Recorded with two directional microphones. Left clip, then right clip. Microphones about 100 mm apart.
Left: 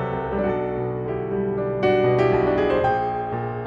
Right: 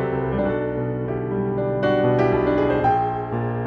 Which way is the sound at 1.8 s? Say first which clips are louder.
Left 1 dB; 30° right (ahead or behind).